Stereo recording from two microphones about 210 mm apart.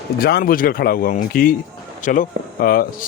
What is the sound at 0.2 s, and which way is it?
Speech, 45° left (ahead or behind).